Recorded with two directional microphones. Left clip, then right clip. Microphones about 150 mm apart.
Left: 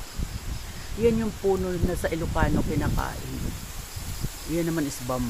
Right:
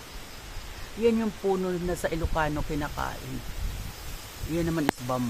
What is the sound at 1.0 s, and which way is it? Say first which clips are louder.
Speech: left 2 dB; 5° left (ahead or behind).